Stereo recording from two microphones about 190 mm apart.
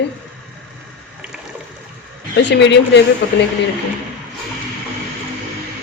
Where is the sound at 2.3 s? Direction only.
65° left (ahead or behind).